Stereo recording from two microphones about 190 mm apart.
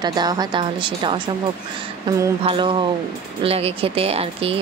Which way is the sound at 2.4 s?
25° right (ahead or behind).